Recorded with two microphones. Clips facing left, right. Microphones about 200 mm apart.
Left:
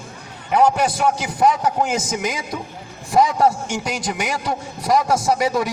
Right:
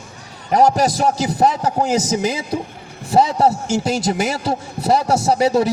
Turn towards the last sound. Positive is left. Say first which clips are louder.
# right 4 dB
turn(degrees=-30)  # may be behind; listen again after turning